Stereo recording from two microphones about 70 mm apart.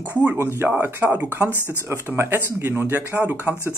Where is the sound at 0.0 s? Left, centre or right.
Right.